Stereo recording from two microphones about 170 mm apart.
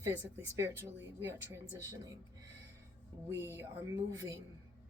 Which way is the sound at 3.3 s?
15° right (ahead or behind).